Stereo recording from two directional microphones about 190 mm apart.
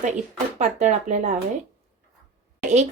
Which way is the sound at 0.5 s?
40° right (ahead or behind).